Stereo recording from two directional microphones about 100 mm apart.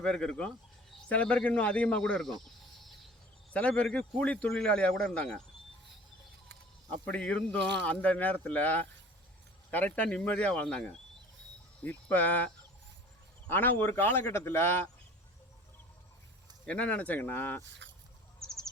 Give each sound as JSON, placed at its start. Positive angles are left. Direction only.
{"t": 0.0, "sound": "speech", "side_deg": 5}
{"t": 3.5, "sound": "speech", "side_deg": 10}
{"t": 7.0, "sound": "a man's voice", "side_deg": 10}
{"t": 16.6, "sound": "speech", "side_deg": 10}
{"t": 18.4, "sound": "bird", "side_deg": 5}